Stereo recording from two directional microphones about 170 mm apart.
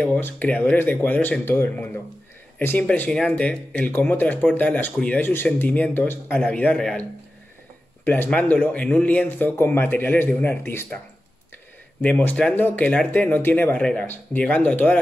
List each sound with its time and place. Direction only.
0.0 s speech: 10° left (ahead or behind)
12.0 s speech: 10° left (ahead or behind)